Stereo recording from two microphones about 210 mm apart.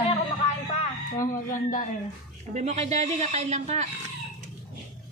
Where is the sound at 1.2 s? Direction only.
40° left (ahead or behind).